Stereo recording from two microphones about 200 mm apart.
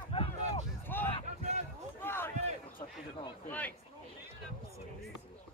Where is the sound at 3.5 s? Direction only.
10° left (ahead or behind).